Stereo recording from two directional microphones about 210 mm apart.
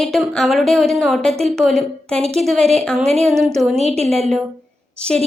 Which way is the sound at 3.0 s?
30° right (ahead or behind).